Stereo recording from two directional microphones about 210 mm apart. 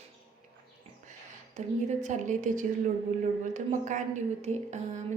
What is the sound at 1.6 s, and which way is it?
A woman's voice, 35° right (ahead or behind).